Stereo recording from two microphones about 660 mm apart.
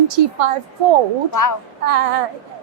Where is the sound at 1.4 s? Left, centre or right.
Left.